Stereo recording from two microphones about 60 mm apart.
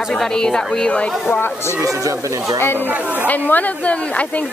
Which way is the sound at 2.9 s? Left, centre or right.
Right.